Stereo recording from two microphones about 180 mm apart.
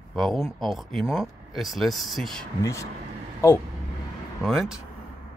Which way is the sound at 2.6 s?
15° left (ahead or behind).